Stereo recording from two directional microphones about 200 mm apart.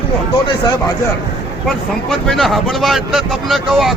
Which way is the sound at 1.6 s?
Centre (ahead or behind).